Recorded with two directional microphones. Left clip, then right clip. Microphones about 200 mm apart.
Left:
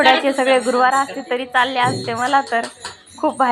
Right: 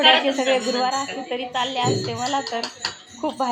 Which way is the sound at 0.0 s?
10° left (ahead or behind).